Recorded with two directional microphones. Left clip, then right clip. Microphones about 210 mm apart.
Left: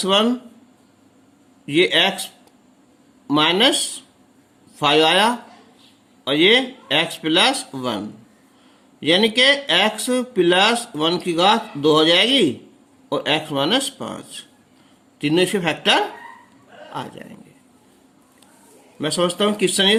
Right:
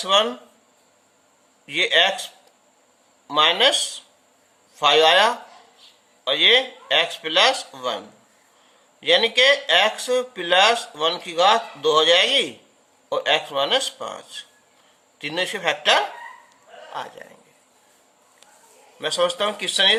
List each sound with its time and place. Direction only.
0.1 s speech: 15° left (ahead or behind)
1.6 s speech: 15° left (ahead or behind)
3.2 s speech: 15° left (ahead or behind)
4.8 s speech: 15° left (ahead or behind)
18.9 s speech: 10° left (ahead or behind)